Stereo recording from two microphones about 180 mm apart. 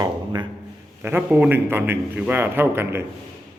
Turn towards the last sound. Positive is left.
turn(degrees=-15)  # may be behind; listen again after turning